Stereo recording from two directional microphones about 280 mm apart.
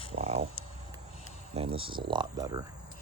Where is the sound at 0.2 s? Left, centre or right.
Right.